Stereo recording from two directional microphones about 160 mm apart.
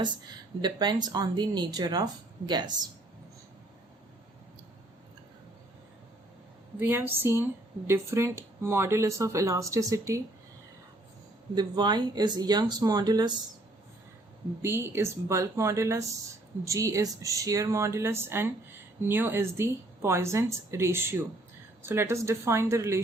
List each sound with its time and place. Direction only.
0.6 s speech: 25° right (ahead or behind)
6.7 s speech: 15° right (ahead or behind)
11.5 s speech: 25° right (ahead or behind)
14.6 s speech: 15° right (ahead or behind)